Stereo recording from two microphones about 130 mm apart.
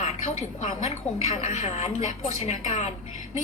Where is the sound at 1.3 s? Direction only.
65° left (ahead or behind).